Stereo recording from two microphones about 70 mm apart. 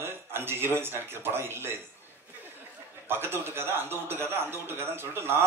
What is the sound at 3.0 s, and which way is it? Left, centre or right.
A woman's voice, right.